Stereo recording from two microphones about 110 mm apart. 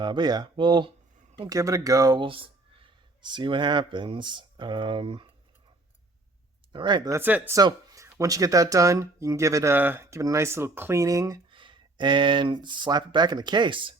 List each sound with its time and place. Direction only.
0.0 s speech: 40° right (ahead or behind)
1.5 s speech: 30° right (ahead or behind)
2.2 s speech: 55° right (ahead or behind)
6.7 s speech: 45° right (ahead or behind)
7.1 s speech: 15° right (ahead or behind)
7.5 s speech: 30° right (ahead or behind)
9.7 s speech: 20° right (ahead or behind)
11.5 s speech: 50° right (ahead or behind)